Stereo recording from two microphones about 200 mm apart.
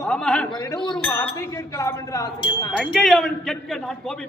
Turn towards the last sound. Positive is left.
turn(degrees=0)  # may be behind; listen again after turning